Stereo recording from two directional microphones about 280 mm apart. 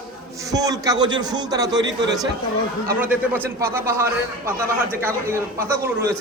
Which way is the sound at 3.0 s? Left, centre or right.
Centre.